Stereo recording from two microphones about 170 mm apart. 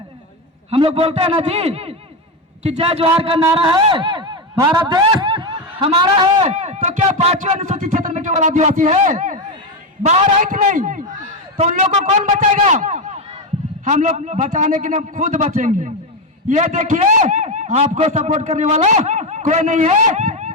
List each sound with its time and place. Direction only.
0.7 s a man's voice: 35° right (ahead or behind)
4.5 s speech: 15° right (ahead or behind); by 6.5 s 30° right (ahead or behind)
6.5 s a man's voice: 45° right (ahead or behind)